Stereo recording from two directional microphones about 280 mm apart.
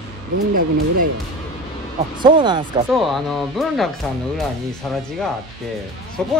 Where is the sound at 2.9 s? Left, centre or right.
Centre.